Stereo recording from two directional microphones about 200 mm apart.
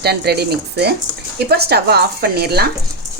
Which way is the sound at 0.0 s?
55° right (ahead or behind).